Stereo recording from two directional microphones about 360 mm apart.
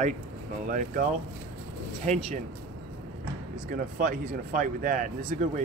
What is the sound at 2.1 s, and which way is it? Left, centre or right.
Speech, centre.